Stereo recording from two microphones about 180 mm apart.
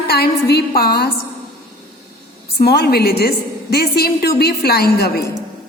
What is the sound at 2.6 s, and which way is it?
A woman's voice, 60° left (ahead or behind).